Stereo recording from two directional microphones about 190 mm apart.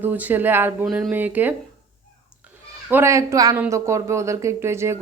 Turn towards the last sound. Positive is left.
turn(degrees=-15)  # may be behind; listen again after turning